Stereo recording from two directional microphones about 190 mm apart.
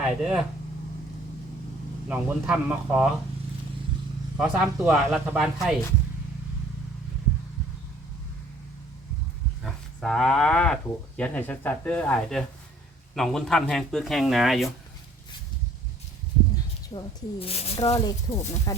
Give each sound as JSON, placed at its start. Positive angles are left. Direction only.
{"t": 0.0, "sound": "speech", "side_deg": -5}
{"t": 2.0, "sound": "speech", "side_deg": -5}
{"t": 4.4, "sound": "speech", "side_deg": -5}
{"t": 9.6, "sound": "speech", "side_deg": 0}
{"t": 16.9, "sound": "speech", "side_deg": 25}
{"t": 17.9, "sound": "speech", "side_deg": 20}